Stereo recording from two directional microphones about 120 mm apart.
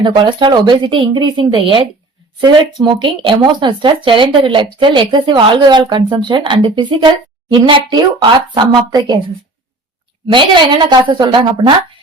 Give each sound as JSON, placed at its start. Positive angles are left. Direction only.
{"t": 0.0, "sound": "speech", "side_deg": -40}
{"t": 10.3, "sound": "speech", "side_deg": -40}